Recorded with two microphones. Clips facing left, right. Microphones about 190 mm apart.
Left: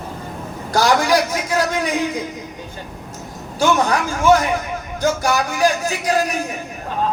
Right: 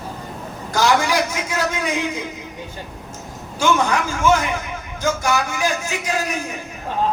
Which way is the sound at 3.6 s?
35° left (ahead or behind).